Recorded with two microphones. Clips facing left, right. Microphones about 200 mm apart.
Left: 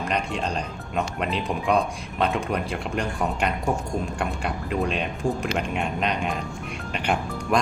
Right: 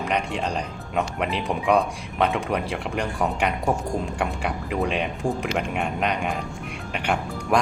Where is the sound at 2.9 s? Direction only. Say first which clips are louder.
Right 1 dB; 15° right (ahead or behind).